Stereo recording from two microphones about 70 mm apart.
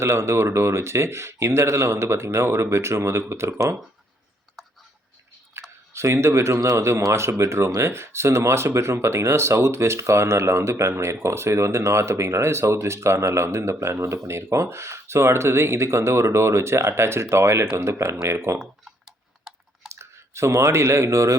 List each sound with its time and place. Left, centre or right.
0.0 s speech: right
5.6 s a sound: right
5.9 s speech: right
19.0 s typing: centre
19.9 s speech: right